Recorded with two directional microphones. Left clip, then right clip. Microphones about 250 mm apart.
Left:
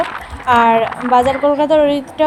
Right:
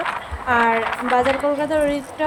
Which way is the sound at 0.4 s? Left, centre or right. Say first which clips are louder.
Left 7 dB; centre.